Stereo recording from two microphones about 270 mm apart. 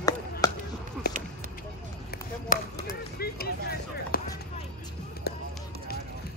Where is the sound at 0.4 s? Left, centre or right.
Centre.